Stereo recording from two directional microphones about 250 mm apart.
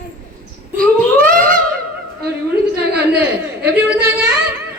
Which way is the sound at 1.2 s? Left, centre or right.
Centre.